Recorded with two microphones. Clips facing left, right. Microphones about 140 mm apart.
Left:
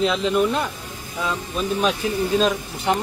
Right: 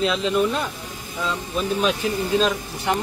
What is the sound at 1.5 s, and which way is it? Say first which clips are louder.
Speech: even; 10° right (ahead or behind).